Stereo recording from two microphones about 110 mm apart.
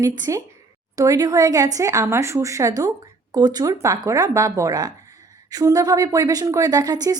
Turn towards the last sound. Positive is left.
turn(degrees=-35)  # may be behind; listen again after turning